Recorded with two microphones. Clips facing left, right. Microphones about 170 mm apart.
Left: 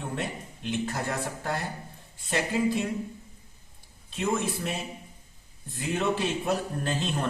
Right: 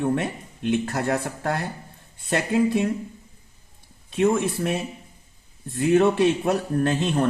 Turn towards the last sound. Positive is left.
turn(degrees=-55)  # may be behind; listen again after turning